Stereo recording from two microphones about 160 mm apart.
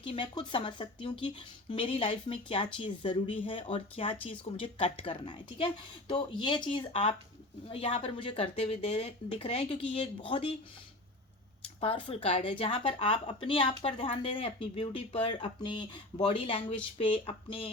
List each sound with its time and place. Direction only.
0.0 s speech: 30° left (ahead or behind)
12.0 s speech: 35° left (ahead or behind)